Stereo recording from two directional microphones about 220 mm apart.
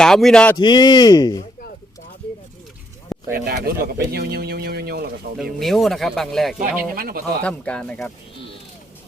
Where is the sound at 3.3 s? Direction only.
45° right (ahead or behind).